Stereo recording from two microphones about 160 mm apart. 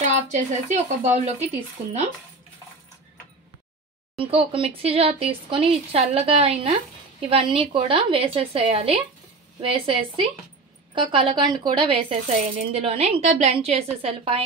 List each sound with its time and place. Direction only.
0.0 s speech: 50° right (ahead or behind)
4.2 s speech: 35° right (ahead or behind)
12.1 s speech: 40° right (ahead or behind)